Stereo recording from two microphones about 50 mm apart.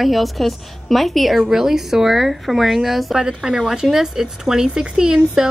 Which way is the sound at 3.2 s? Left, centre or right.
Centre.